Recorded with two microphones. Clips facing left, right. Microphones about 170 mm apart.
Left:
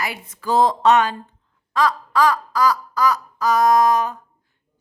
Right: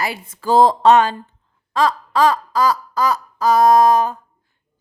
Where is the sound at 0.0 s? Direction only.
30° right (ahead or behind).